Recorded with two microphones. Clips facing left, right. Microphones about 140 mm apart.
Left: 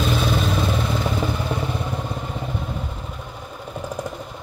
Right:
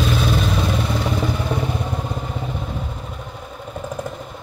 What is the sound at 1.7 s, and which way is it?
Vehicle, 10° right (ahead or behind).